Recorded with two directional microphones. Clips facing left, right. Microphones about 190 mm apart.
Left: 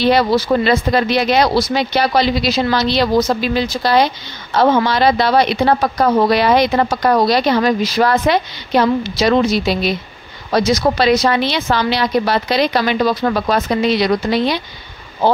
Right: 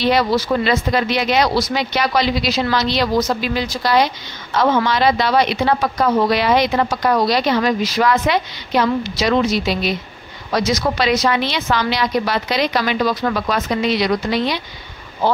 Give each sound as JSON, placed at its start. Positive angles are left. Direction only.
{"t": 0.0, "sound": "speech", "side_deg": 30}